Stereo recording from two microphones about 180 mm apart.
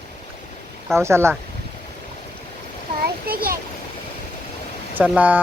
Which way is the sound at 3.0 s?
55° right (ahead or behind).